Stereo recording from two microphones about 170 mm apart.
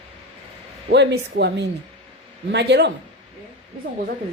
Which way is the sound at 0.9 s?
75° right (ahead or behind).